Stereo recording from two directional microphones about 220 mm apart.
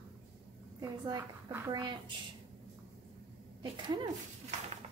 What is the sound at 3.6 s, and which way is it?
Speech, 20° right (ahead or behind).